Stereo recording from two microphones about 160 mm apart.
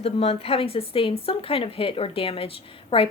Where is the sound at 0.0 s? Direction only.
40° left (ahead or behind).